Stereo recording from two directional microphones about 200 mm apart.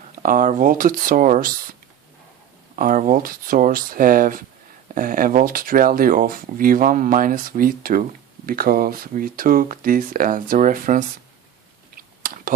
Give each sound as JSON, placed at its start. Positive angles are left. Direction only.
{"t": 0.2, "sound": "speech", "side_deg": -40}
{"t": 2.7, "sound": "speech", "side_deg": -45}
{"t": 11.9, "sound": "chewing", "side_deg": -45}